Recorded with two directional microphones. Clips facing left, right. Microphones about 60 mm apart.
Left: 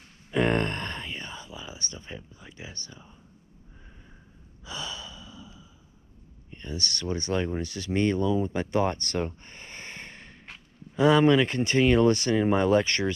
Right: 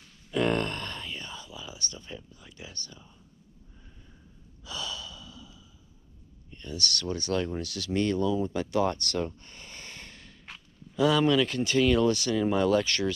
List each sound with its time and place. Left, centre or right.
0.3 s whispering: left
4.6 s sigh: left
6.5 s speech: left